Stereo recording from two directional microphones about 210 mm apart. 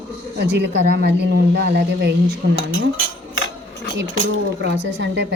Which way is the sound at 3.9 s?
60° right (ahead or behind).